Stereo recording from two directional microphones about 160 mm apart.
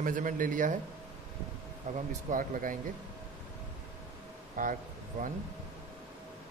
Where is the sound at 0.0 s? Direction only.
55° right (ahead or behind).